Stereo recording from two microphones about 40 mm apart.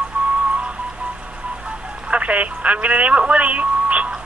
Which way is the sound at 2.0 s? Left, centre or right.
Right.